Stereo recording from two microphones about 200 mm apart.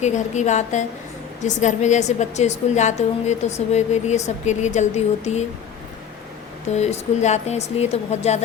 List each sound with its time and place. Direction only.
0.0 s a woman's voice: 35° left (ahead or behind)
6.7 s a woman's voice: 35° left (ahead or behind)